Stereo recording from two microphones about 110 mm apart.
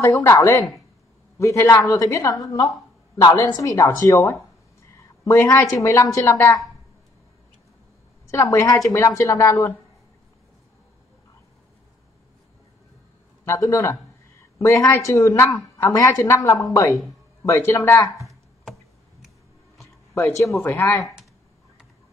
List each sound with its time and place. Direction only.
0.0 s a woman's voice: 25° left (ahead or behind)
8.3 s a woman's voice: 25° left (ahead or behind)
13.5 s a woman's voice: 30° left (ahead or behind)
20.2 s a woman's voice: 30° left (ahead or behind)